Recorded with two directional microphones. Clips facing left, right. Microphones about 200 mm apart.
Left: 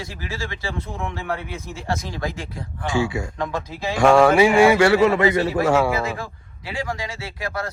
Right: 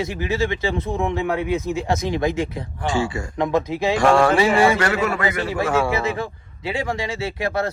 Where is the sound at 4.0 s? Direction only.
Centre (ahead or behind).